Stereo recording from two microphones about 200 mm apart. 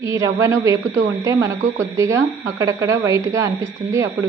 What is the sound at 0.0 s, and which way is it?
Speech, 15° right (ahead or behind).